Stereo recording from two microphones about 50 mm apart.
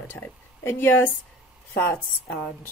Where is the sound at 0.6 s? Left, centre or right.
Left.